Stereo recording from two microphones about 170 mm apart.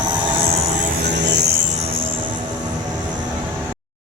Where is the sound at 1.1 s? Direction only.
90° right.